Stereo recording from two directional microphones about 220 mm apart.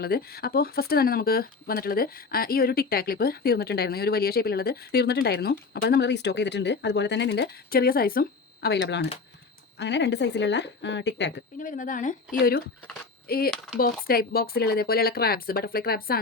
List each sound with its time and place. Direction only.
0.0 s speech: 45° left (ahead or behind)
11.6 s speech: 35° left (ahead or behind)